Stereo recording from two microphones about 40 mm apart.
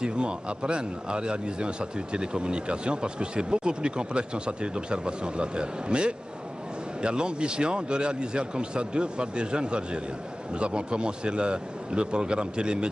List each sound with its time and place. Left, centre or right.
0.0 s a man's voice: right